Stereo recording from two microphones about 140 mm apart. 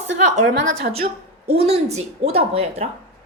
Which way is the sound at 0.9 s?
45° right (ahead or behind).